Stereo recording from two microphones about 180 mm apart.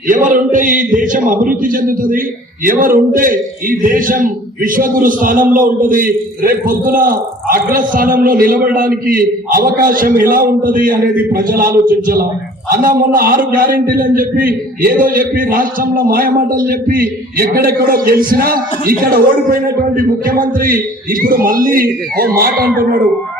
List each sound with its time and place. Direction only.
0.1 s a man's voice: 50° right (ahead or behind)